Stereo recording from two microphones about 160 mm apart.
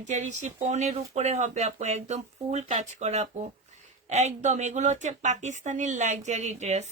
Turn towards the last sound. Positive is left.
turn(degrees=-45)  # may be behind; listen again after turning